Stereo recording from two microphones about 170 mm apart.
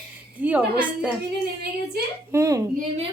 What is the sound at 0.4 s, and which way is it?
Speech, 10° right (ahead or behind).